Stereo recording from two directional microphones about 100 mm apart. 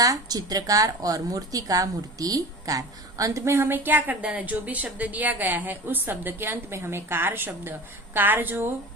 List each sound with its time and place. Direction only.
0.0 s a woman's voice: 40° right (ahead or behind); by 8.7 s 20° right (ahead or behind)